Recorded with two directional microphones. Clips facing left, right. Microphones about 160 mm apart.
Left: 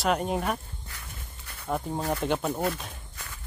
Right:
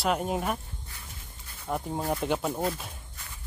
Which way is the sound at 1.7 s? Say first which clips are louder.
Left 1 dB; centre (ahead or behind).